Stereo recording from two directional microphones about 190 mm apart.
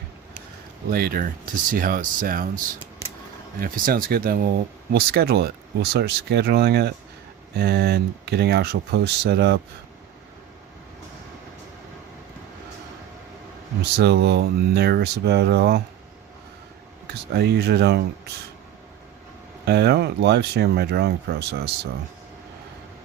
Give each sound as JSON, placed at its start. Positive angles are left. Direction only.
{"t": 0.9, "sound": "speech", "side_deg": -50}
{"t": 13.9, "sound": "speech", "side_deg": -60}
{"t": 17.3, "sound": "speech", "side_deg": -60}
{"t": 19.6, "sound": "speech", "side_deg": -60}